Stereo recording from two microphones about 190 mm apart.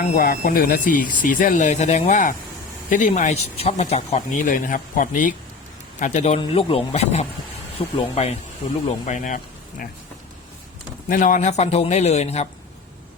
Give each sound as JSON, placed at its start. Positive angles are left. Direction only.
{"t": 0.0, "sound": "speech", "side_deg": 40}
{"t": 11.1, "sound": "speech", "side_deg": 45}